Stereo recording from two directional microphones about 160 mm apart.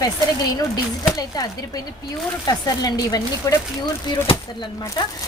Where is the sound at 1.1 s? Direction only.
25° left (ahead or behind).